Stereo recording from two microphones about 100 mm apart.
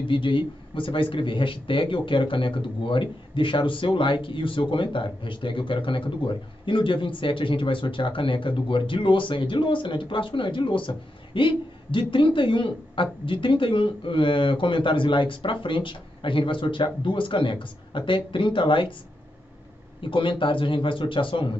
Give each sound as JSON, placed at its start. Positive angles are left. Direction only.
{"t": 0.1, "sound": "speech", "side_deg": 55}
{"t": 20.0, "sound": "speech", "side_deg": 55}